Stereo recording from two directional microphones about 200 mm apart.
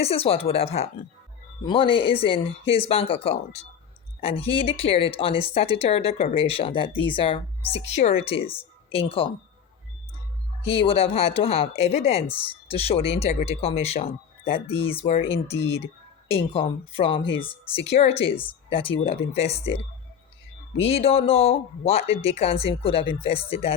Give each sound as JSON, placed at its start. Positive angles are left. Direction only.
{"t": 0.0, "sound": "speech", "side_deg": 30}
{"t": 10.6, "sound": "speech", "side_deg": 30}
{"t": 20.7, "sound": "speech", "side_deg": 30}